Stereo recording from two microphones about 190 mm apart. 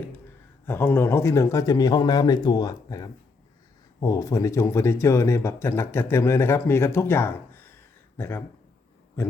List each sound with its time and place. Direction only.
0.6 s a man's voice: 10° left (ahead or behind)